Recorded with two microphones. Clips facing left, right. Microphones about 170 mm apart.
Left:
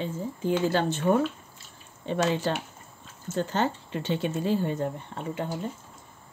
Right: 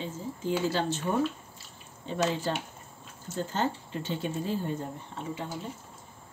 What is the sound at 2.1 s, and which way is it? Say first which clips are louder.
Speech: left 3 dB; 70° left (ahead or behind).